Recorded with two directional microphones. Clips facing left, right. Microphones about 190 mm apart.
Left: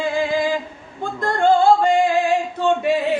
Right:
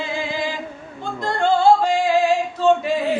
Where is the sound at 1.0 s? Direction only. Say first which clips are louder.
Left 3 dB; 50° left (ahead or behind).